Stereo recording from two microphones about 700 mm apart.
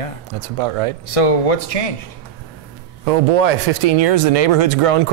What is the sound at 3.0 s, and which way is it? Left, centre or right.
Speech, right.